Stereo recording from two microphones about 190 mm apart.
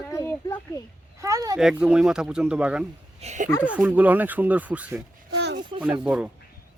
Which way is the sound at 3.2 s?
40° right (ahead or behind).